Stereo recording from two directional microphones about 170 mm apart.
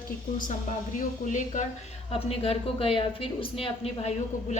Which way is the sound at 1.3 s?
50° left (ahead or behind).